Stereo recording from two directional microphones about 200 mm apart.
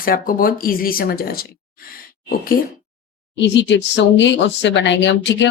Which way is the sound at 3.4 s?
60° left (ahead or behind).